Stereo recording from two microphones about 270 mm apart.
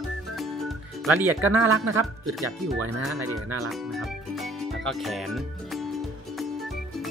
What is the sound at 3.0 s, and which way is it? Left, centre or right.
Speech, centre.